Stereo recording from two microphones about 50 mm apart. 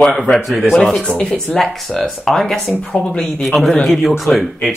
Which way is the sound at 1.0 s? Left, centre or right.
Centre.